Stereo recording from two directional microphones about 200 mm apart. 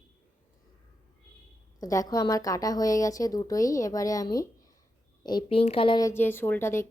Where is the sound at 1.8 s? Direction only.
15° left (ahead or behind).